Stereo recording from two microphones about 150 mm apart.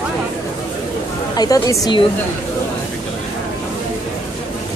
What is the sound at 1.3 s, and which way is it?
Speech, 25° left (ahead or behind).